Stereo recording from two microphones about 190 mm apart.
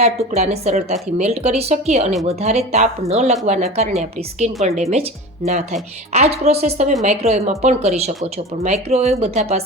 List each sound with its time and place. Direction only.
0.0 s a woman's voice: 35° right (ahead or behind)